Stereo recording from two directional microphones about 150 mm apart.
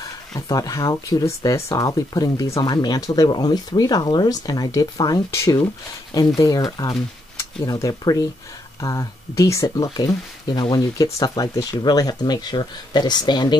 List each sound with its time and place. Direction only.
0.0 s speech: 25° left (ahead or behind)